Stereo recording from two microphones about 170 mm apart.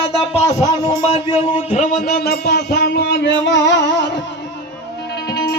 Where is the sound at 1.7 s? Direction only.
55° left (ahead or behind); by 3.7 s 90° left.